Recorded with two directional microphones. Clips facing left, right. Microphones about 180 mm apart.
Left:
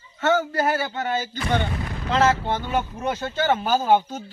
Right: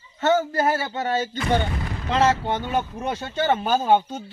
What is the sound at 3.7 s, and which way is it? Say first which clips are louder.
Speech: even; 5° left (ahead or behind).